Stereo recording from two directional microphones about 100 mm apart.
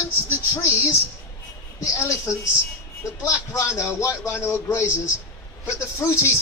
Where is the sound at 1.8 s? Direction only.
30° left (ahead or behind).